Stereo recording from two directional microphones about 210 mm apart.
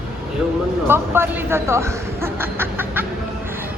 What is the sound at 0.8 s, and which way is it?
Speech, 10° right (ahead or behind).